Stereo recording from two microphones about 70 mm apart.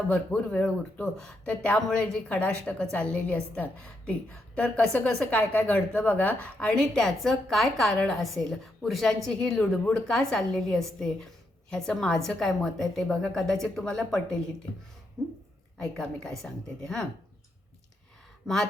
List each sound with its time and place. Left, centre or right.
0.3 s a woman's voice: centre
18.4 s a woman's voice: centre